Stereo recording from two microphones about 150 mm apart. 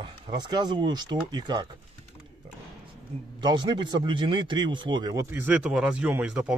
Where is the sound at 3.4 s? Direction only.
30° right (ahead or behind).